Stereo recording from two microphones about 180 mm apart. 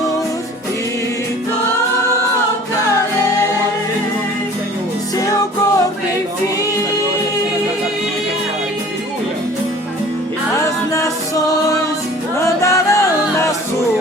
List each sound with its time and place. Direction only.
5.1 s music: 20° left (ahead or behind)
10.5 s music: 15° left (ahead or behind)